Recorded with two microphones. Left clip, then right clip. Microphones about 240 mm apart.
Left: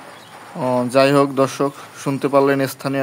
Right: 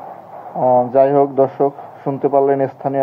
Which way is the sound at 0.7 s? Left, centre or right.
Left.